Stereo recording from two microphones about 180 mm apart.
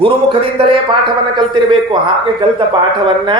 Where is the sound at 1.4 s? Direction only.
25° right (ahead or behind).